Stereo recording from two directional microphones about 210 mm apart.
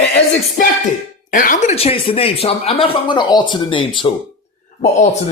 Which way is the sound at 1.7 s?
25° left (ahead or behind).